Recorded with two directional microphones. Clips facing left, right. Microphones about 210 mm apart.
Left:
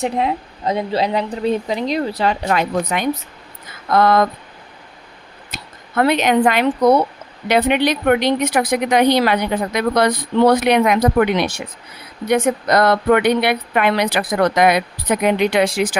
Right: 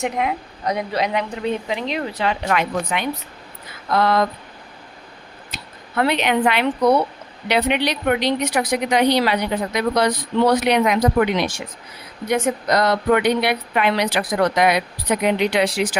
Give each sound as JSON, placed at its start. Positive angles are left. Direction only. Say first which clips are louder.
{"t": 0.0, "sound": "speech", "louder": "left 3 dB", "side_deg": 30}
{"t": 3.9, "sound": "speech", "louder": "left 4 dB", "side_deg": 50}
{"t": 6.0, "sound": "a woman's voice", "louder": "left 4 dB", "side_deg": 45}